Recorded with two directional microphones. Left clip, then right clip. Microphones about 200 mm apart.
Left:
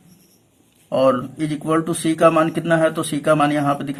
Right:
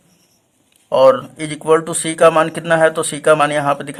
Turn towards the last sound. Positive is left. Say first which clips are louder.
# right 3 dB
turn(degrees=-40)  # may be behind; listen again after turning